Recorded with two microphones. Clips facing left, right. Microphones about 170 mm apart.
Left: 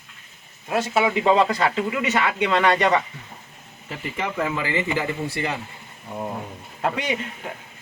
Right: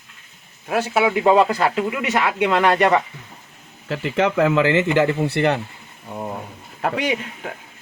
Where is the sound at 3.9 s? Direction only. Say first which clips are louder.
Right 9 dB; 90° right; by 5.6 s 65° right (ahead or behind).